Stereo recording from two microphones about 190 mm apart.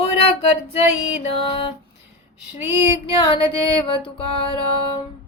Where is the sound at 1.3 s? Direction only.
30° left (ahead or behind).